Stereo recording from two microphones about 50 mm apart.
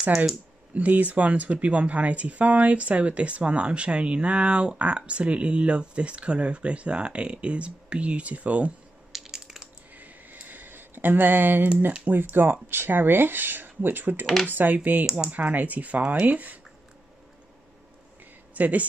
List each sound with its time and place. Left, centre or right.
0.7 s speech: right
9.1 s crushing: centre
9.9 s a sound: right
12.1 s speech: right
14.2 s speech: centre
14.5 s speech: right
18.5 s speech: right